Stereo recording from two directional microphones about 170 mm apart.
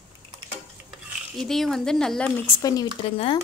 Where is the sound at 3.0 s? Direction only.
30° left (ahead or behind).